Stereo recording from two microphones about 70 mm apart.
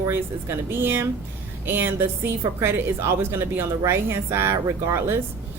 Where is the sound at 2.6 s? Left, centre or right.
Right.